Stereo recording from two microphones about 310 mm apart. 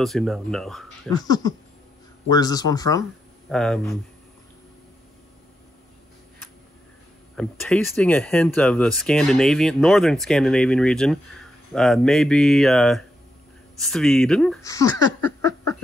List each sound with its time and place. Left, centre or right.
0.0 s speech: centre
1.1 s speech: centre
7.3 s speech: centre